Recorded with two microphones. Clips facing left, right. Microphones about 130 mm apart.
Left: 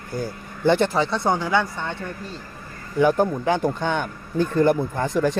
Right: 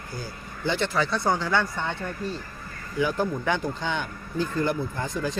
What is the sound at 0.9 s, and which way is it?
Speech, 25° left (ahead or behind).